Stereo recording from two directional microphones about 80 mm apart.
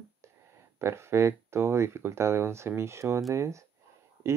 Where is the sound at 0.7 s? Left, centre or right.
Right.